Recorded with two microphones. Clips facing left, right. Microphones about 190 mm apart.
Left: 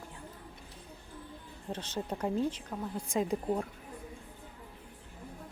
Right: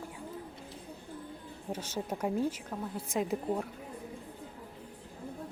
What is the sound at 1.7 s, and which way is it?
Speech, 10° right (ahead or behind).